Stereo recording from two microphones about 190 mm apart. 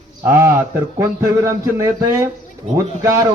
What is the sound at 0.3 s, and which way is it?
Speech, 15° right (ahead or behind).